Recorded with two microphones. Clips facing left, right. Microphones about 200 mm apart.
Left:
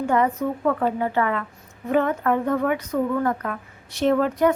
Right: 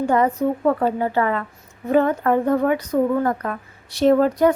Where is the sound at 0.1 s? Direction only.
35° right (ahead or behind).